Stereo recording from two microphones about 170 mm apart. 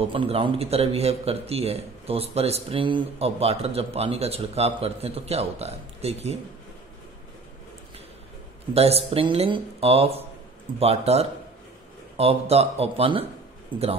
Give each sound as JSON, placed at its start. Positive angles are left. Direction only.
{"t": 0.1, "sound": "a man's voice", "side_deg": -30}
{"t": 8.7, "sound": "a man's voice", "side_deg": -35}